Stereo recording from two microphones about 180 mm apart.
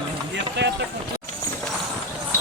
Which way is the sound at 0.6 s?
75° right (ahead or behind).